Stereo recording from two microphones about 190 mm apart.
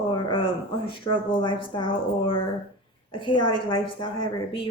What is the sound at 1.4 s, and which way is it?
A woman's voice, 25° left (ahead or behind).